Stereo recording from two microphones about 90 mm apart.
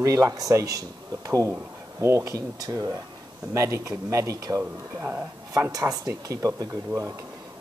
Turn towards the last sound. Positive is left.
turn(degrees=-35)  # may be behind; listen again after turning